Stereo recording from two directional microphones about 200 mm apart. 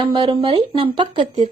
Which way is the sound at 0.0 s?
25° right (ahead or behind).